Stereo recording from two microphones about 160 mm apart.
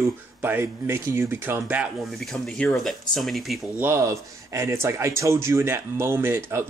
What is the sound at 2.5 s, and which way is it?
Speech, 5° left (ahead or behind).